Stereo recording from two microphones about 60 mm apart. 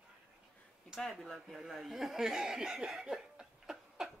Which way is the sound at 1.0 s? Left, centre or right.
Centre.